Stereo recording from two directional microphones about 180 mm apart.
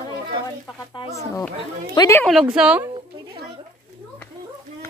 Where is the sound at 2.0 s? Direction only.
15° left (ahead or behind).